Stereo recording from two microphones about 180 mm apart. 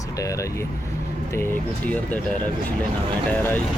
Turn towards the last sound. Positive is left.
turn(degrees=10)  # may be behind; listen again after turning